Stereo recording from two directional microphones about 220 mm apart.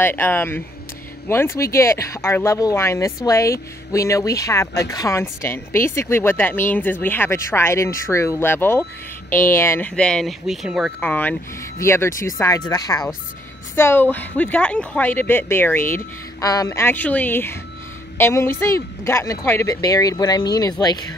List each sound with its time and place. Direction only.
0.0 s speech: 10° left (ahead or behind)